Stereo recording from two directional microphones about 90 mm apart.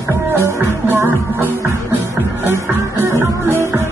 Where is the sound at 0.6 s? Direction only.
30° right (ahead or behind).